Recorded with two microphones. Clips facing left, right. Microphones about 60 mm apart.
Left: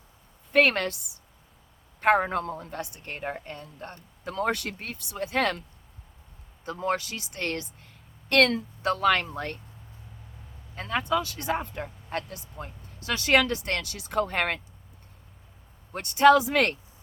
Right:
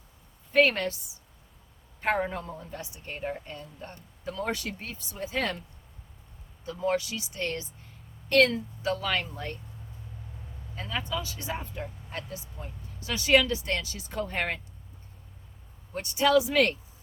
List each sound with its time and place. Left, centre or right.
0.5 s a woman's voice: left
2.0 s a woman's voice: left
6.7 s a woman's voice: left
10.8 s speech: left
15.9 s speech: left